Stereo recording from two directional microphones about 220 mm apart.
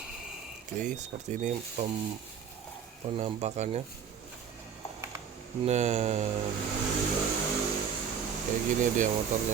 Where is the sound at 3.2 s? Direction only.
30° right (ahead or behind).